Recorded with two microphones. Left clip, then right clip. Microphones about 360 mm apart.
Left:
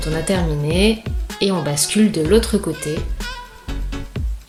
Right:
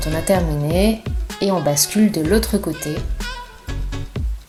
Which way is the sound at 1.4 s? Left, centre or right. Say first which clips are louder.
Right 2 dB; centre.